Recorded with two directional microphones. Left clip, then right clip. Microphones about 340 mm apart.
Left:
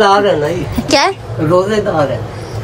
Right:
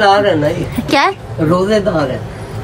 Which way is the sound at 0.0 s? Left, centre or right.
Centre.